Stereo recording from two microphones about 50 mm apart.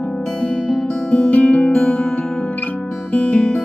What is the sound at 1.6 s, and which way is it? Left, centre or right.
Music, centre.